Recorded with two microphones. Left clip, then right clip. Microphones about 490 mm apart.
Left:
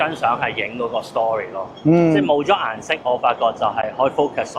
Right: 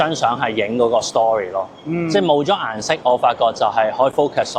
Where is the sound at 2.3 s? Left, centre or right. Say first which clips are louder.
Right 1 dB; right.